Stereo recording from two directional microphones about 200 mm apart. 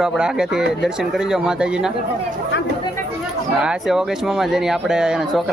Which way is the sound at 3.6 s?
5° right (ahead or behind).